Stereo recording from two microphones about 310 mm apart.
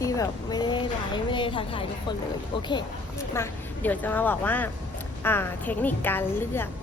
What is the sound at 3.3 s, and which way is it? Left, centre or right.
A woman's voice, centre.